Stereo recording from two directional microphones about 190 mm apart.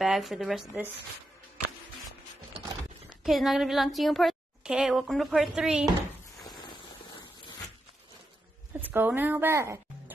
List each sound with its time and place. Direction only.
0.0 s a woman's voice: centre (ahead or behind)
3.3 s a woman's voice: centre (ahead or behind)
6.4 s a sound: 25° left (ahead or behind)
8.8 s speech: 10° right (ahead or behind)